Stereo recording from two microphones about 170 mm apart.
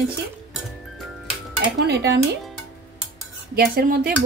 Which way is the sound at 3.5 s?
60° right (ahead or behind).